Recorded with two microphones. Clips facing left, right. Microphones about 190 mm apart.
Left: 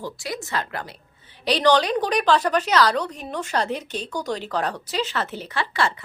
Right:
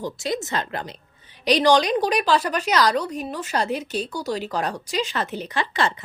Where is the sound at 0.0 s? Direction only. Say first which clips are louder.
Right 5 dB; 20° right (ahead or behind).